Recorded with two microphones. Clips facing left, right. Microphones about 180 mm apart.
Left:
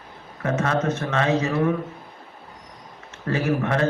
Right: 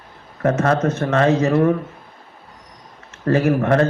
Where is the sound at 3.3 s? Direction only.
50° right (ahead or behind).